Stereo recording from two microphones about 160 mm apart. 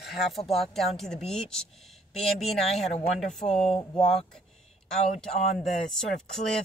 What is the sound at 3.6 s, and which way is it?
Speech, 35° left (ahead or behind).